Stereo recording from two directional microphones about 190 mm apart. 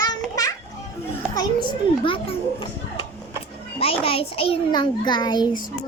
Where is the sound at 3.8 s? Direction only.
30° left (ahead or behind).